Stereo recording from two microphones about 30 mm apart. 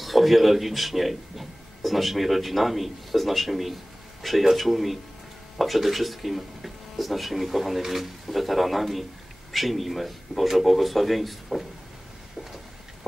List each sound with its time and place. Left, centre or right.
0.0 s a man's voice: centre